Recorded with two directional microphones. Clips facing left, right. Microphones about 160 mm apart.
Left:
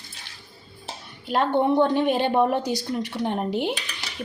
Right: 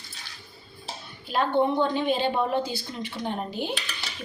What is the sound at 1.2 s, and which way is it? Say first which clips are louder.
A woman's voice: left 2 dB; 65° left (ahead or behind).